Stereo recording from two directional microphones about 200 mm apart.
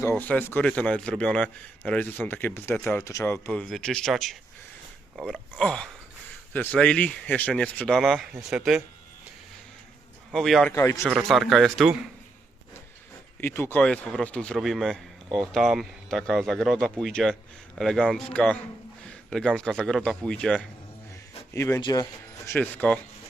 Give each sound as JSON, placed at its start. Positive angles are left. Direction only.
{"t": 0.0, "sound": "a man's voice", "side_deg": 10}
{"t": 10.3, "sound": "a man's voice", "side_deg": 0}
{"t": 10.7, "sound": "speech", "side_deg": 15}
{"t": 11.1, "sound": "a man's voice", "side_deg": 0}
{"t": 13.4, "sound": "a man's voice", "side_deg": 10}
{"t": 22.5, "sound": "speech", "side_deg": 5}